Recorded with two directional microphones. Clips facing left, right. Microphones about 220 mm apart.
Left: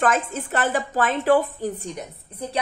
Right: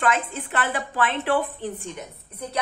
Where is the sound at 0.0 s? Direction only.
45° left (ahead or behind).